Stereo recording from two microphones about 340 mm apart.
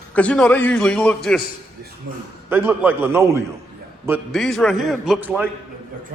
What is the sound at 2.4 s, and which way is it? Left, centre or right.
A man's voice, centre.